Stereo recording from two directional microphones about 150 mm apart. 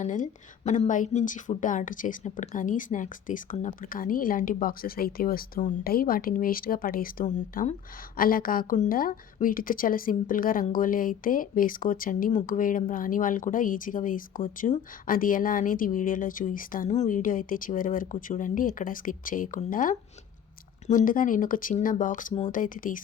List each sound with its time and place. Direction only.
0.0 s a woman's voice: 55° left (ahead or behind)